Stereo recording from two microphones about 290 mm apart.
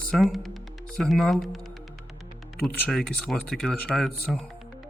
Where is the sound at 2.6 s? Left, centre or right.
Centre.